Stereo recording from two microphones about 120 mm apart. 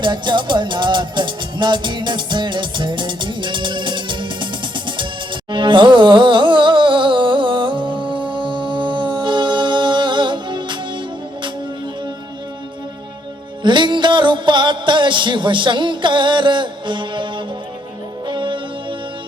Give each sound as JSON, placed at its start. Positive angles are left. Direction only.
{"t": 0.0, "sound": "music", "side_deg": -40}
{"t": 13.6, "sound": "music", "side_deg": -40}